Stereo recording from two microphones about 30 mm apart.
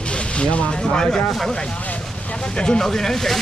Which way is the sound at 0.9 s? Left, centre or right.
Left.